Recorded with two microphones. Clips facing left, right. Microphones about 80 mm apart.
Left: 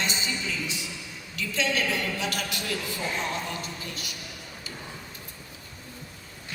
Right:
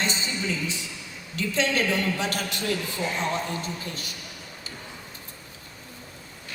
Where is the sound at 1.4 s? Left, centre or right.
Right.